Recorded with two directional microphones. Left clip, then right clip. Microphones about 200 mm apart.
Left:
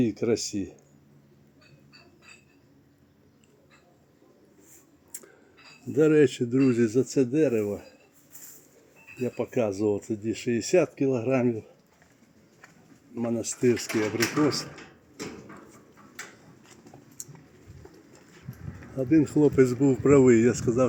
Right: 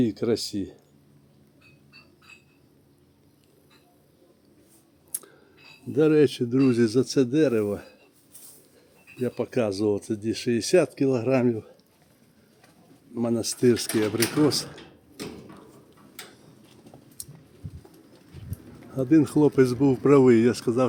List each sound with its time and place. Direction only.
0.0 s speech: 5° right (ahead or behind)
6.0 s speech: 5° right (ahead or behind); by 7.9 s 20° right (ahead or behind)
9.2 s speech: 15° right (ahead or behind)
13.1 s speech: 30° right (ahead or behind)
18.5 s a sound: 55° right (ahead or behind)
18.9 s speech: 20° right (ahead or behind)